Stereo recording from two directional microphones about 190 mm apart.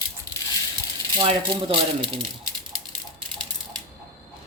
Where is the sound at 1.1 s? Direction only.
25° right (ahead or behind).